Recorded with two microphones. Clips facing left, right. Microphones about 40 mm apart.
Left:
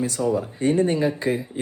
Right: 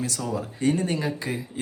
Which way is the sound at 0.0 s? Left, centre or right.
Left.